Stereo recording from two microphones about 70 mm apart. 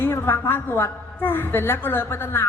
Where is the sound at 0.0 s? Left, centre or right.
Left.